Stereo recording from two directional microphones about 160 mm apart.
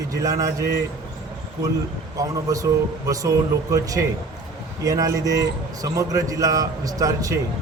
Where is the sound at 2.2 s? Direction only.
20° right (ahead or behind).